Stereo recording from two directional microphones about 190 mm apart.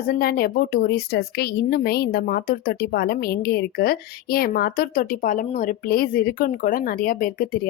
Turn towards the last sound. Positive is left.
turn(degrees=45)  # may be behind; listen again after turning